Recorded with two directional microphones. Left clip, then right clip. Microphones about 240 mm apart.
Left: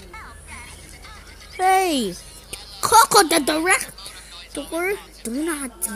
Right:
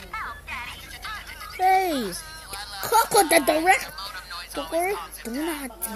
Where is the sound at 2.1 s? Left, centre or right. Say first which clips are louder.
Right 3 dB; right.